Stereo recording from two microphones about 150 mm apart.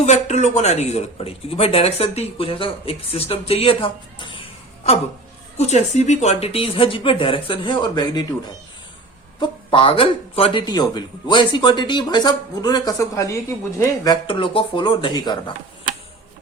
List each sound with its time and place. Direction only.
0.0 s speech: 50° left (ahead or behind); by 8.3 s 30° left (ahead or behind)
9.4 s speech: 35° left (ahead or behind)